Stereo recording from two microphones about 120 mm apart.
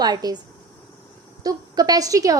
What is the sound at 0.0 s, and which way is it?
Speech, 35° right (ahead or behind).